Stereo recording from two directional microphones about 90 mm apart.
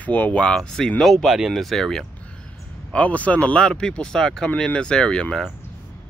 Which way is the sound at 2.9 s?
15° left (ahead or behind).